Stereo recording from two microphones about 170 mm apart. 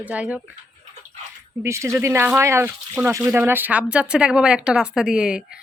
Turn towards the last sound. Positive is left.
turn(degrees=-5)  # may be behind; listen again after turning